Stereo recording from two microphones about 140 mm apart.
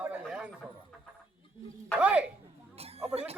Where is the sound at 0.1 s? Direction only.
5° right (ahead or behind).